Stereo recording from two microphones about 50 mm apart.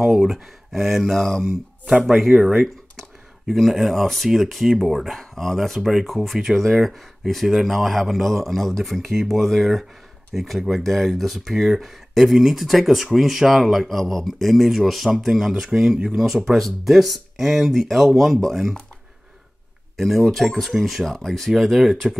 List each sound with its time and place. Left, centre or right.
0.0 s speech: centre
1.9 s speech: centre
2.1 s speech: centre
20.0 s speech: centre